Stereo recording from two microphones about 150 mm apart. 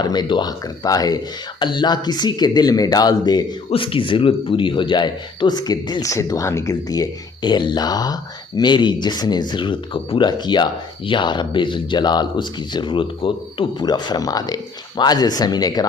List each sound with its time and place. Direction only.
0.0 s speech: 30° left (ahead or behind)
3.7 s speech: 35° left (ahead or behind)